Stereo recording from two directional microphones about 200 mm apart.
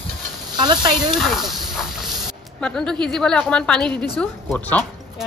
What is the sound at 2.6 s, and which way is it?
Speech, 5° left (ahead or behind).